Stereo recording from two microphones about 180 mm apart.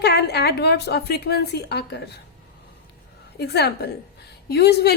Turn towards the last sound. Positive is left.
turn(degrees=65)  # may be behind; listen again after turning